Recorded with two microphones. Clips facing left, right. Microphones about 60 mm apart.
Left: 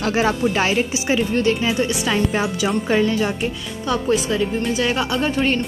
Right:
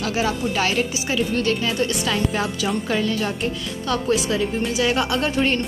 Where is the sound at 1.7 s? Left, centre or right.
Centre.